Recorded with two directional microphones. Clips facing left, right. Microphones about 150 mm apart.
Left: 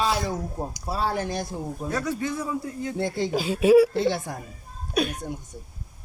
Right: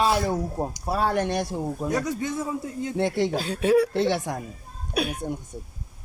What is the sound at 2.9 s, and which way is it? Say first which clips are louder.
Speech: right 4 dB; 65° right (ahead or behind).